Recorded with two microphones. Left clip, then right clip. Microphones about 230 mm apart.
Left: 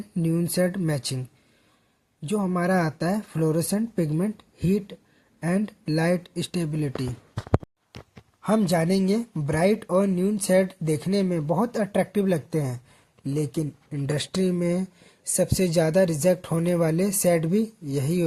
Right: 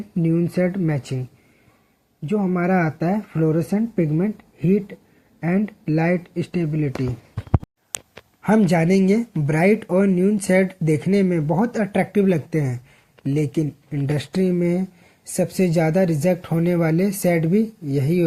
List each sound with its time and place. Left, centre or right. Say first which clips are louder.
0.2 s speech: right 4 dB; left
2.2 s speech: right 3 dB; left
8.4 s speech: right 4 dB; left